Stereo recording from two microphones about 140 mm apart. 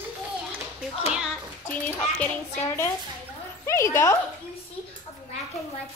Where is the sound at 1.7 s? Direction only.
10° left (ahead or behind).